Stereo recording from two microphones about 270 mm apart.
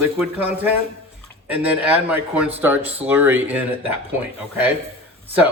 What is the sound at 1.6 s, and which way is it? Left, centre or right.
A man's voice, centre.